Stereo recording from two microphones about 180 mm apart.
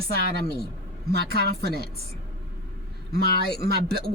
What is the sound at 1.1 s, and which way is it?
Speech, 60° right (ahead or behind).